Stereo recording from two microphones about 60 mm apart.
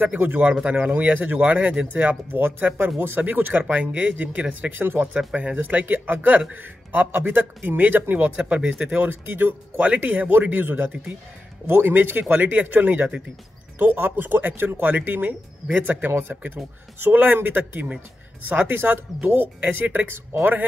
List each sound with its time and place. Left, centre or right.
0.7 s speech: right
5.3 s speech: right
8.4 s speech: centre
9.3 s speech: right
9.9 s speech: right